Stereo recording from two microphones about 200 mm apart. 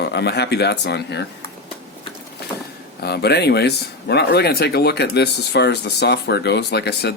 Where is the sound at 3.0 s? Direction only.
50° left (ahead or behind).